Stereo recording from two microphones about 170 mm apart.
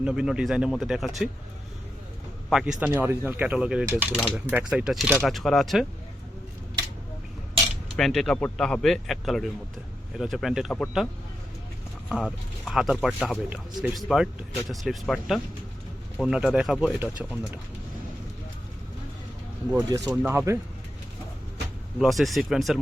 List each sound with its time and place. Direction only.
0.0 s speech: 5° right (ahead or behind)
2.5 s speech: 5° right (ahead or behind)
7.9 s speech: centre (ahead or behind)
17.0 s speech: 10° right (ahead or behind)
20.1 s speech: 15° right (ahead or behind)
21.9 s speech: centre (ahead or behind)